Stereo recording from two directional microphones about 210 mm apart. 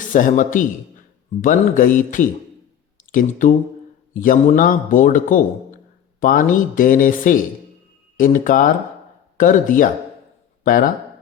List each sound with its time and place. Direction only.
0.1 s a man's voice: 40° left (ahead or behind)